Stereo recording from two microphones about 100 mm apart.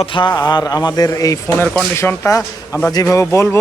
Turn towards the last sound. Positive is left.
turn(degrees=30)  # may be behind; listen again after turning